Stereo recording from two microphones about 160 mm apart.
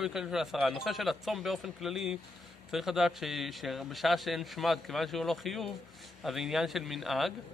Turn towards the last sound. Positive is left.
turn(degrees=0)  # may be behind; listen again after turning